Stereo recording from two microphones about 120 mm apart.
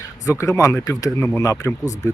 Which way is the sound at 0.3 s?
25° left (ahead or behind).